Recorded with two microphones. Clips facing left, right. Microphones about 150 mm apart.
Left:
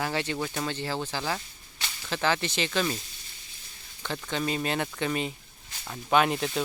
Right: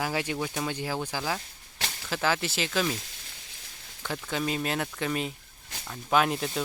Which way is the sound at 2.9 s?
85° right.